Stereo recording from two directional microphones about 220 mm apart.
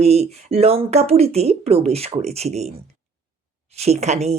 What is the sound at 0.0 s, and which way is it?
Speech, 30° right (ahead or behind).